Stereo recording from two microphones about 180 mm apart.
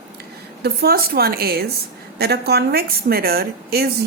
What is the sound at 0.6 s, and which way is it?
A woman's voice, 60° right (ahead or behind).